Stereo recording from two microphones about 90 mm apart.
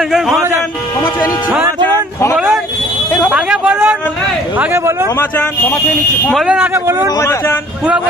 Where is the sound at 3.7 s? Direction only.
25° right (ahead or behind).